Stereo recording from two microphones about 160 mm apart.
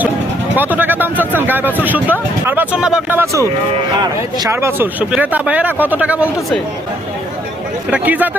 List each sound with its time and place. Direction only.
0.5 s speech: 10° right (ahead or behind)
3.7 s speech: 25° right (ahead or behind)
4.5 s speech: 15° right (ahead or behind)
7.9 s speech: 10° right (ahead or behind)